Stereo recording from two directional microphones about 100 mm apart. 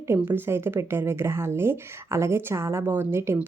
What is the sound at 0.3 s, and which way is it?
A woman's voice, 25° right (ahead or behind).